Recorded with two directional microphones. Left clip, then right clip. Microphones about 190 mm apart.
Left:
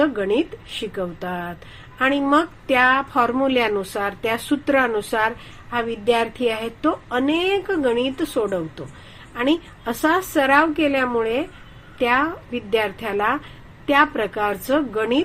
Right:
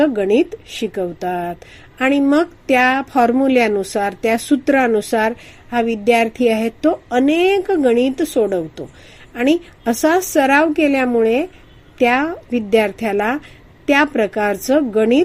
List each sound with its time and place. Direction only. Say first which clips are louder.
0.8 s speech: right 5 dB; 50° right (ahead or behind)